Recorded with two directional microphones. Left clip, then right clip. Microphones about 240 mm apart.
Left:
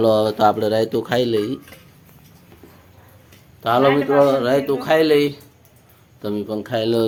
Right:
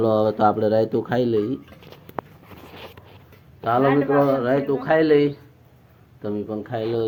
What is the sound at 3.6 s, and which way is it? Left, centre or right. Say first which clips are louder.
Speech: left 3 dB; left.